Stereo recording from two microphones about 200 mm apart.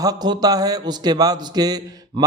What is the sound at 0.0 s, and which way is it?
A man's voice, 20° right (ahead or behind).